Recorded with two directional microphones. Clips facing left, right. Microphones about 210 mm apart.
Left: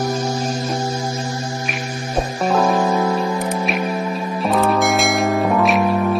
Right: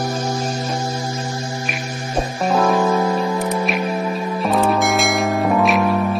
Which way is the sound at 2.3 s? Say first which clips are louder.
Even; centre (ahead or behind).